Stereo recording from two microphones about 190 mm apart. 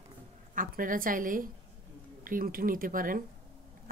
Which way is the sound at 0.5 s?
45° right (ahead or behind).